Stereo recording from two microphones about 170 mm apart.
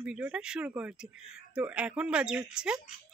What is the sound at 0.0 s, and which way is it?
Speech, 5° right (ahead or behind).